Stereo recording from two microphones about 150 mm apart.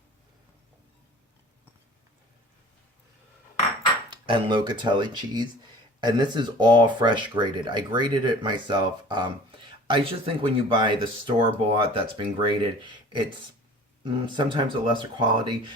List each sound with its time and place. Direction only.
4.1 s speech: 30° right (ahead or behind)
14.0 s speech: 35° right (ahead or behind)